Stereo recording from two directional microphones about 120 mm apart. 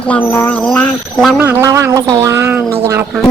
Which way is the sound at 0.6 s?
10° left (ahead or behind).